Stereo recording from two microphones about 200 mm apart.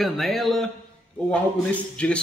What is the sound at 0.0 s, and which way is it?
Speech, centre (ahead or behind).